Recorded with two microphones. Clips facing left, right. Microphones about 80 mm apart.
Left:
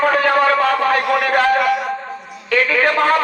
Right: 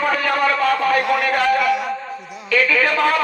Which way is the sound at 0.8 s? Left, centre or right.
Left.